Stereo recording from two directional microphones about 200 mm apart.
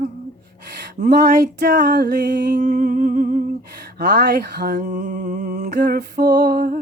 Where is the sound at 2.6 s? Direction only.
35° right (ahead or behind).